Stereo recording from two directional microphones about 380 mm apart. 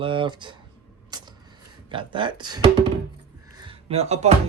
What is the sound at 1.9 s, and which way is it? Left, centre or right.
Speech, centre.